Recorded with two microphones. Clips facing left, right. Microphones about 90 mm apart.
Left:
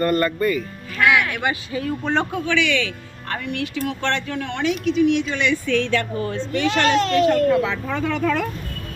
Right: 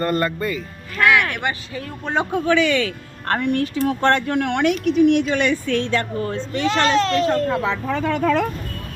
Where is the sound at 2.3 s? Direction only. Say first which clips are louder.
Right 4 dB; 40° right (ahead or behind).